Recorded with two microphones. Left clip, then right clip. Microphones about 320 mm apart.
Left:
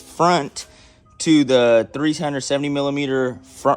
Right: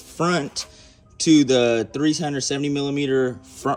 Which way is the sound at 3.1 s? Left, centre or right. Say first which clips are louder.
Even; left.